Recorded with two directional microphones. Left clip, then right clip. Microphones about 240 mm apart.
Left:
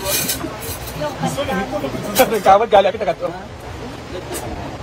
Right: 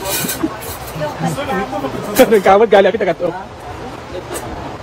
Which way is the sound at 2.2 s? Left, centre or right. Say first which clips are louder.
Right 3 dB; right.